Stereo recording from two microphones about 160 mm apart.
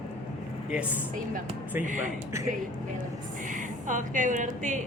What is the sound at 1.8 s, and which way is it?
Speech, 50° right (ahead or behind).